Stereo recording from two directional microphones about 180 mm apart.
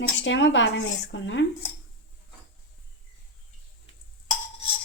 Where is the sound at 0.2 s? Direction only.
90° left.